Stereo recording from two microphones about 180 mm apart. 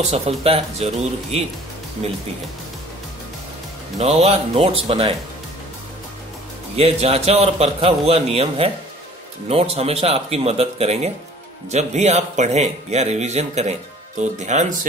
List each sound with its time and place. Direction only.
0.1 s speech: 35° right (ahead or behind)
4.0 s speech: 35° right (ahead or behind)
6.8 s speech: 35° right (ahead or behind)